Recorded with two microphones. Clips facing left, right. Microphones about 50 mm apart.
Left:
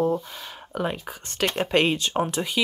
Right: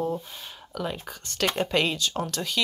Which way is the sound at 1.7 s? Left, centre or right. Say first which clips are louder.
Left 4 dB; left.